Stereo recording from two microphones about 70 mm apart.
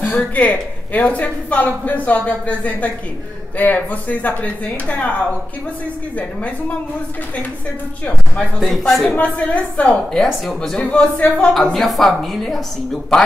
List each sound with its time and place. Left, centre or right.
0.0 s a woman's voice: left
8.0 s speech: centre
9.1 s a woman's voice: left
10.1 s speech: centre
11.5 s speech: centre